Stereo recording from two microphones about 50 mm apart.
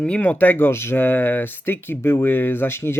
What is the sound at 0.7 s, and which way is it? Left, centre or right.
Speech, left.